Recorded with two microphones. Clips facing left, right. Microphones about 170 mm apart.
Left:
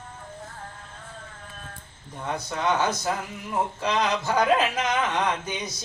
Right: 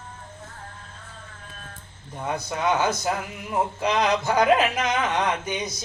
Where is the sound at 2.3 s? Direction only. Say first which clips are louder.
Right 1 dB; 10° right (ahead or behind).